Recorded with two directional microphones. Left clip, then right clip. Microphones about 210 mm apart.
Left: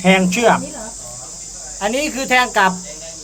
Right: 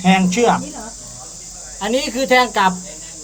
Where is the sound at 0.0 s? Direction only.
30° left (ahead or behind).